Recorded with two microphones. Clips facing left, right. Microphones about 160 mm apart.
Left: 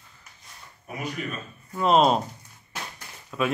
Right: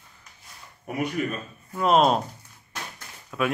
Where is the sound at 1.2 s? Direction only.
45° right (ahead or behind).